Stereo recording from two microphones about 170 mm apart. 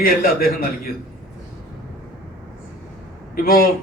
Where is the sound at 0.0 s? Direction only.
60° left (ahead or behind).